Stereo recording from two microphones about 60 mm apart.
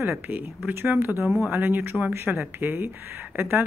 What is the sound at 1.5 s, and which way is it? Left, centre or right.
Speech, right.